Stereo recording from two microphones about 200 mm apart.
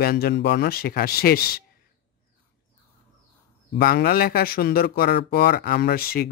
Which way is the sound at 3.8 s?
50° left (ahead or behind).